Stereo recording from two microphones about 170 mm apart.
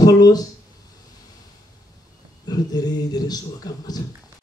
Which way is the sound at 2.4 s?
20° left (ahead or behind).